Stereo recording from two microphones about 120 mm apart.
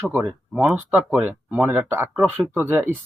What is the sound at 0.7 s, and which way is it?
Speech, 15° right (ahead or behind).